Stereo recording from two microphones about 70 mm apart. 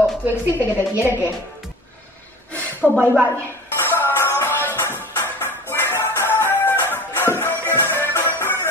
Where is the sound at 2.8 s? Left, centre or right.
Centre.